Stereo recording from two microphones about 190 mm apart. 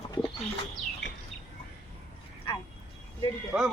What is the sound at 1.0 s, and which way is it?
Bird, 70° left (ahead or behind).